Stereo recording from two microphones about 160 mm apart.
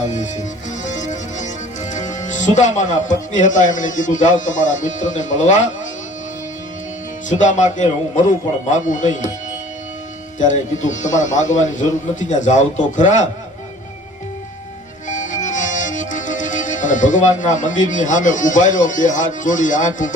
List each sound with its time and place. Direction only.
0.0 s a man's voice: 50° left (ahead or behind)
7.3 s a man's voice: 50° left (ahead or behind)
10.3 s a man's voice: 50° left (ahead or behind)
15.1 s music: 50° left (ahead or behind)